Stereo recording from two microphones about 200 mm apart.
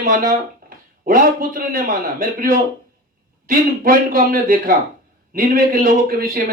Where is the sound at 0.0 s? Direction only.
45° right (ahead or behind).